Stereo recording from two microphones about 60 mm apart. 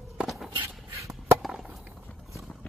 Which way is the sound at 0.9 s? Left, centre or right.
Right.